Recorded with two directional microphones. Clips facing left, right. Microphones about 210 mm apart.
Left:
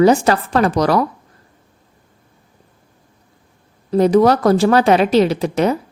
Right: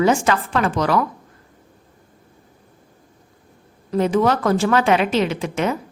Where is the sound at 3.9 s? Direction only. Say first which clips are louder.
Left 6 dB; 35° left (ahead or behind).